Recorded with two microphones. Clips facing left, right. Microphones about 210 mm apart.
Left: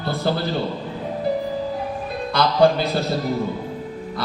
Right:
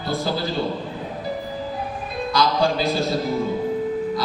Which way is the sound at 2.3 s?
60° left (ahead or behind).